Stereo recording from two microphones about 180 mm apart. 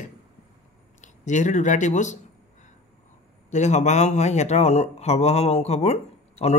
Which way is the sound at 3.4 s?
40° left (ahead or behind).